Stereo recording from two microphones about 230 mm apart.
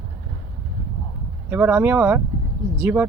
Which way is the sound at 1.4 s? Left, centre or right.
Centre.